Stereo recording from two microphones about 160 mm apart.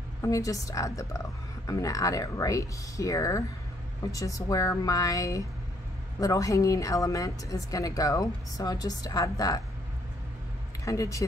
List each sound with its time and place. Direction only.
0.2 s a woman's voice: 20° left (ahead or behind)
10.9 s a woman's voice: 20° left (ahead or behind)